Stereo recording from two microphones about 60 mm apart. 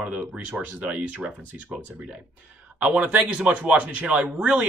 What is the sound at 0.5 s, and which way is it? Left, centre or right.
Speech, right.